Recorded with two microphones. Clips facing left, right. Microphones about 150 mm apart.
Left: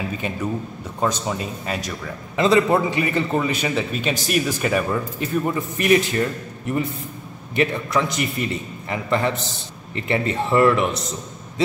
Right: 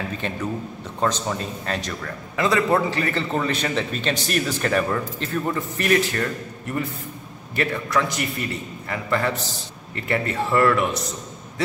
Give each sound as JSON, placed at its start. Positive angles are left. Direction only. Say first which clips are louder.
{"t": 0.2, "sound": "a man's voice", "louder": "left 1 dB", "side_deg": 10}
{"t": 2.3, "sound": "a man's voice", "louder": "left 3 dB", "side_deg": 20}
{"t": 7.5, "sound": "a man's voice", "louder": "left 2 dB", "side_deg": 20}